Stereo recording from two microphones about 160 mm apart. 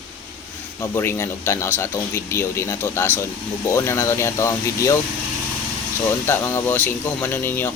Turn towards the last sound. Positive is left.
turn(degrees=15)  # may be behind; listen again after turning